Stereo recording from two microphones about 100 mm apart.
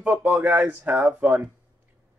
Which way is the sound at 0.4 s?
15° right (ahead or behind).